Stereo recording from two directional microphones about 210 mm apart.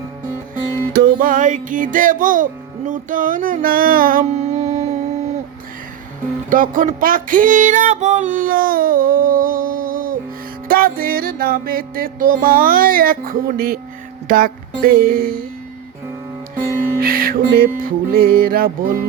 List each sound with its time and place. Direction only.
0.9 s music: 45° right (ahead or behind)
6.5 s music: 40° right (ahead or behind)
17.0 s music: 45° right (ahead or behind)